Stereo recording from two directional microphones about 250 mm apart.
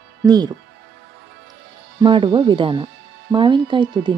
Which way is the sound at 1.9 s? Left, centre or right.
Centre.